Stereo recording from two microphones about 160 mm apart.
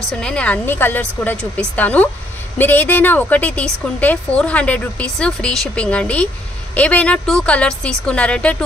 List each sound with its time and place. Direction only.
0.2 s a woman's voice: 5° left (ahead or behind)